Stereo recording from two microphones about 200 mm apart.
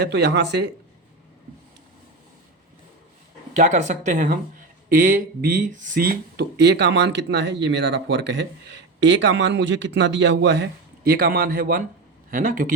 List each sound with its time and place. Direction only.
0.0 s speech: 55° right (ahead or behind)
3.5 s speech: 40° right (ahead or behind)